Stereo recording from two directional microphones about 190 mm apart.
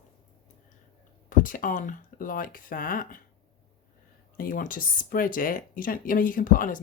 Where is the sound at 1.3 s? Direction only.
45° left (ahead or behind).